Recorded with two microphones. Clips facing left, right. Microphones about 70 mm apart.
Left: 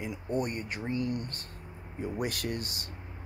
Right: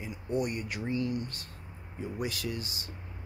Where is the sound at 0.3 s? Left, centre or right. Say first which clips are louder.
Right 1 dB; left.